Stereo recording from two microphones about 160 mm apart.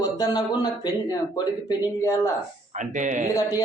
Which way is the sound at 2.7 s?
50° right (ahead or behind).